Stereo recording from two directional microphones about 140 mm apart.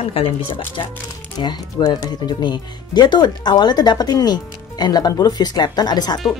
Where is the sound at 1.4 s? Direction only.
30° left (ahead or behind).